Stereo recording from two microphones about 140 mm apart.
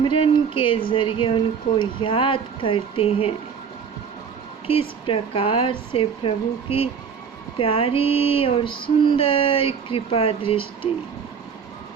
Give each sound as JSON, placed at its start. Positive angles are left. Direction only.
{"t": 0.0, "sound": "female singing", "side_deg": 40}
{"t": 4.6, "sound": "female singing", "side_deg": 40}